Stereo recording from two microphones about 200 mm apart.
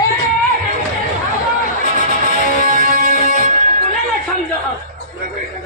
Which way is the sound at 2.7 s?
45° right (ahead or behind).